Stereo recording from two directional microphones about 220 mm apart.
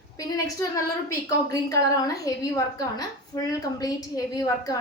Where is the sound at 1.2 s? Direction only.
15° left (ahead or behind).